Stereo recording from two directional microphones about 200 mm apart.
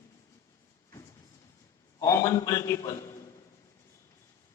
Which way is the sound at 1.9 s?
15° left (ahead or behind).